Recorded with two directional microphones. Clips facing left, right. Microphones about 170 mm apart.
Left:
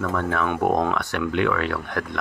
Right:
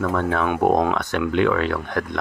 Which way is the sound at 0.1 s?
30° right (ahead or behind).